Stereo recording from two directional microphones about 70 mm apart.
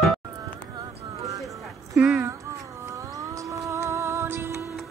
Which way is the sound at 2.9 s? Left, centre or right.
Right.